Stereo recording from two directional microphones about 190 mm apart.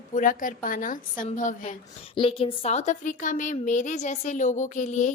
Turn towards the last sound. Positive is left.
turn(degrees=40)  # may be behind; listen again after turning